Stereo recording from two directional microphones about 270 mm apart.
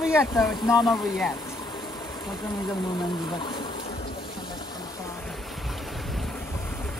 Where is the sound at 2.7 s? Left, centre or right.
Centre.